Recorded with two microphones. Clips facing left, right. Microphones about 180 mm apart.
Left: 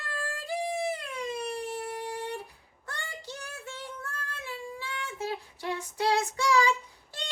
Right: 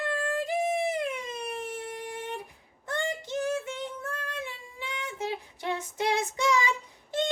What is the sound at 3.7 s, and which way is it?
Child singing, 20° right (ahead or behind).